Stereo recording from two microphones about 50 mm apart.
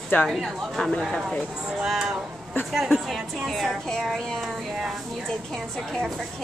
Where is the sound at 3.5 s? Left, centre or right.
Centre.